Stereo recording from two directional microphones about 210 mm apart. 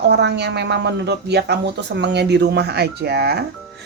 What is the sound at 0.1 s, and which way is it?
A woman's voice, 55° right (ahead or behind).